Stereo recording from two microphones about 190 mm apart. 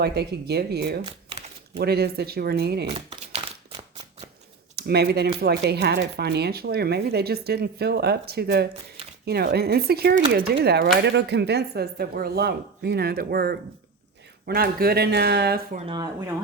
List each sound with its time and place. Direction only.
0.0 s speech: 60° right (ahead or behind)
3.1 s a sound: 30° right (ahead or behind)
4.7 s speech: 55° right (ahead or behind)
15.9 s speech: 20° right (ahead or behind)